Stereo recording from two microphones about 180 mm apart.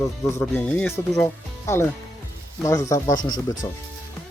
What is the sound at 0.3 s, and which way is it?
Speech, 10° left (ahead or behind).